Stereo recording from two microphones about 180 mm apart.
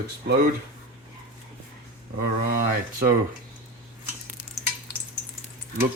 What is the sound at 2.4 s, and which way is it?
Speech, 55° right (ahead or behind).